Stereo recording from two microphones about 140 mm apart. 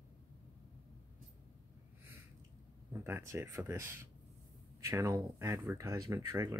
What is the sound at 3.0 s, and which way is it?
Speech, 20° right (ahead or behind).